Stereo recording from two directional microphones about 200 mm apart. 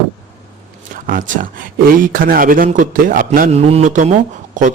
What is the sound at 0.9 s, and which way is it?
A man's voice, 45° right (ahead or behind).